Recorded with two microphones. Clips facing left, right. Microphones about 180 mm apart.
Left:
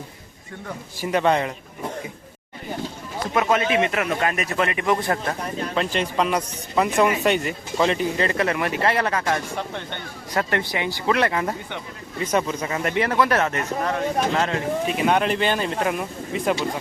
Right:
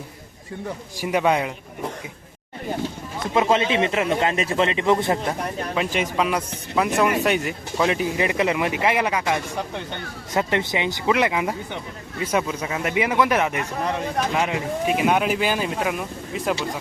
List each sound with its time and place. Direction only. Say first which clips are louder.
0.9 s speech: even; 10° right (ahead or behind)
3.3 s a man's voice: right 1 dB; 25° right (ahead or behind)
5.7 s a man's voice: even; 10° right (ahead or behind)